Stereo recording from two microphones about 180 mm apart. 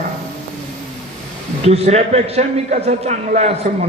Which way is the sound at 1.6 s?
35° right (ahead or behind).